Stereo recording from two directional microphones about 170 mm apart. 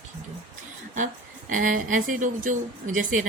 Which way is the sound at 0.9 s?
50° right (ahead or behind).